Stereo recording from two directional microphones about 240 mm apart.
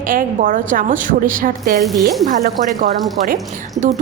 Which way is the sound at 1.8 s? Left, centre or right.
Centre.